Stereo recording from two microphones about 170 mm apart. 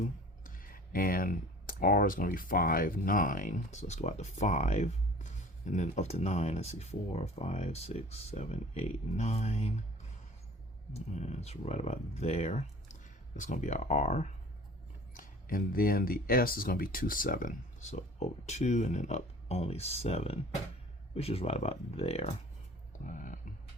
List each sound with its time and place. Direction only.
0.0 s speech: 55° left (ahead or behind)
10.9 s speech: 40° left (ahead or behind)
15.1 s speech: 55° left (ahead or behind); by 22.4 s 35° left (ahead or behind)
22.9 s a sound: 50° left (ahead or behind)